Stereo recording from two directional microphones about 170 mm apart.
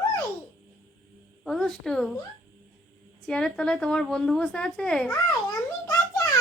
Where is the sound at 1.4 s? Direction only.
Centre (ahead or behind).